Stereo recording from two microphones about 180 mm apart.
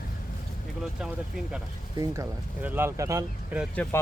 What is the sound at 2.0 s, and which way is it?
Speech, 15° right (ahead or behind).